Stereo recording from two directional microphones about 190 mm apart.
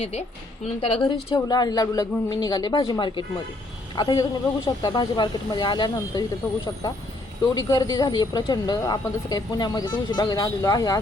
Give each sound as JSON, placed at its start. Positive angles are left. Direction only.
{"t": 0.0, "sound": "a woman's voice", "side_deg": 35}
{"t": 7.7, "sound": "a woman's voice", "side_deg": 20}